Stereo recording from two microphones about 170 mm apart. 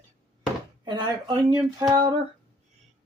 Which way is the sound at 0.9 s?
25° right (ahead or behind).